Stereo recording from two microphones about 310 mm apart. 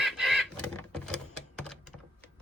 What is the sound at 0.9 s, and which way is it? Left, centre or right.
Typewriter, centre.